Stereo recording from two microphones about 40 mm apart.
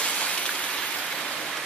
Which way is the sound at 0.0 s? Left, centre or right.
Left.